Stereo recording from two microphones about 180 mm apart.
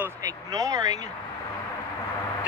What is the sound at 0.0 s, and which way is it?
Speech, 20° right (ahead or behind).